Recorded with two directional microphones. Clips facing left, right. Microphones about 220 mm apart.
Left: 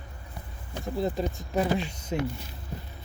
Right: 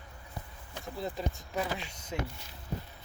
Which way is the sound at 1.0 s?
35° left (ahead or behind).